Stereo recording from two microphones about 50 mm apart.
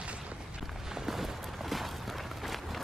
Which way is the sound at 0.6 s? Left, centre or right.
Centre.